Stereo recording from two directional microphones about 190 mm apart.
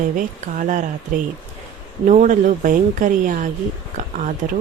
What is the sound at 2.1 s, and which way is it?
A woman's voice, 40° right (ahead or behind).